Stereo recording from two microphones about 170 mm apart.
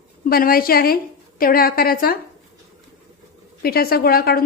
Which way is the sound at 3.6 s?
65° left (ahead or behind).